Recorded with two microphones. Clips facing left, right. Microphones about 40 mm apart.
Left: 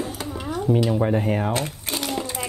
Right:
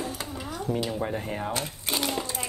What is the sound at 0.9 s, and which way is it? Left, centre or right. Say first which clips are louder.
Speech: left 8 dB; left.